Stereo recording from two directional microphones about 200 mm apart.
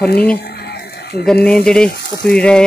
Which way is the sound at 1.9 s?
50° left (ahead or behind).